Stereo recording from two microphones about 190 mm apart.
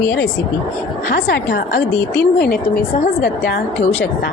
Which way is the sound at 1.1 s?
55° left (ahead or behind).